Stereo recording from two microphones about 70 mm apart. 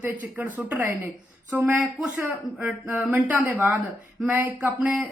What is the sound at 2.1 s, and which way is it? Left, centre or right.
Speech, right.